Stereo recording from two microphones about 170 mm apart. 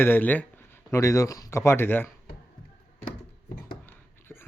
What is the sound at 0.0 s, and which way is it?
Speech, 10° left (ahead or behind).